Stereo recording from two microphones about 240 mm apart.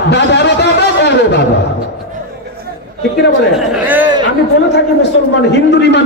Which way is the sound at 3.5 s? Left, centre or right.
Centre.